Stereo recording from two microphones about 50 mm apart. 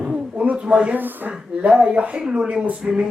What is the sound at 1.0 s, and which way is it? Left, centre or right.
Roaring cats, right.